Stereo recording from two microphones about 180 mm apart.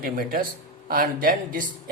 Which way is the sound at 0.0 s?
55° right (ahead or behind).